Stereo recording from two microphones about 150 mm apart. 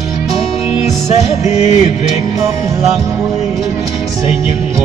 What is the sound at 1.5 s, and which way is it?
Music, 45° left (ahead or behind).